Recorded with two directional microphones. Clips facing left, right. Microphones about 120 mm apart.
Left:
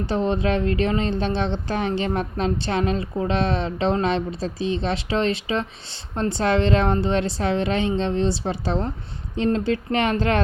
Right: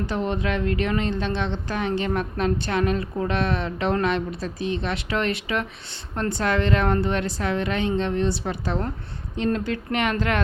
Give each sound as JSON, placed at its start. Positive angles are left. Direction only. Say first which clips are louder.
{"t": 0.1, "sound": "speech", "louder": "left 6 dB", "side_deg": 30}